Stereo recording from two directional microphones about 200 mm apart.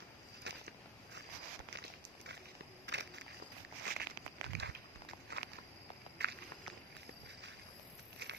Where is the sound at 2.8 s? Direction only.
60° right (ahead or behind).